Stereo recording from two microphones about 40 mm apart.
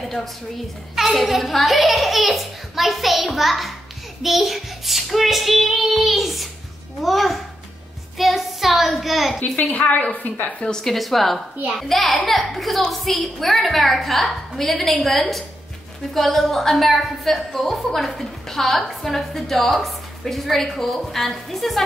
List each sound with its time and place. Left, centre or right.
0.0 s a sound: centre
0.9 s a woman's voice: centre
9.7 s a woman's voice: left
10.8 s speech: centre